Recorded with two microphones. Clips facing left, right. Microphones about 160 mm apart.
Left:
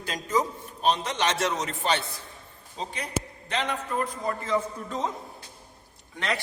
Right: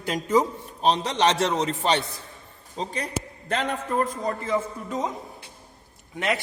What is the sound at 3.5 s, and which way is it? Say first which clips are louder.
Speech: right 3 dB; 45° right (ahead or behind).